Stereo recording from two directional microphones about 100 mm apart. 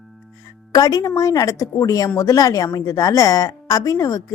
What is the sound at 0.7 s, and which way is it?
A woman's voice, 35° left (ahead or behind).